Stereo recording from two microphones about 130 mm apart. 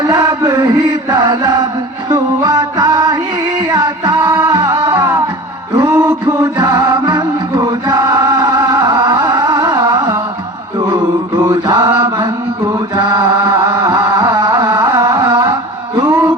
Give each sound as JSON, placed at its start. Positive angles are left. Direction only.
{"t": 0.2, "sound": "chant", "side_deg": -30}
{"t": 2.0, "sound": "music", "side_deg": -30}
{"t": 4.9, "sound": "music", "side_deg": -20}
{"t": 5.7, "sound": "a sound", "side_deg": -20}
{"t": 6.6, "sound": "music", "side_deg": -30}
{"t": 10.8, "sound": "mantra", "side_deg": -30}
{"t": 13.0, "sound": "chant", "side_deg": -30}
{"t": 16.0, "sound": "music", "side_deg": -30}